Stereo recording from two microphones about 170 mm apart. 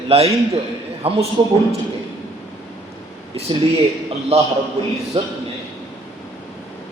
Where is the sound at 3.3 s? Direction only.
35° right (ahead or behind).